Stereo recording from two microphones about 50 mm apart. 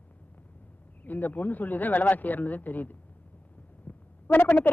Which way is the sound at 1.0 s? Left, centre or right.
Left.